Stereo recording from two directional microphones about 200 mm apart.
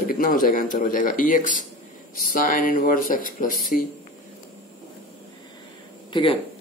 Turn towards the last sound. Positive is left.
turn(degrees=25)  # may be behind; listen again after turning